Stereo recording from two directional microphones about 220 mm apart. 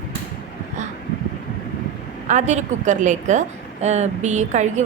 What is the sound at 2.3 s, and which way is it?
A woman's voice, 30° right (ahead or behind).